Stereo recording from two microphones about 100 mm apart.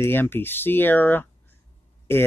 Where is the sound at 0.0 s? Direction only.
20° left (ahead or behind).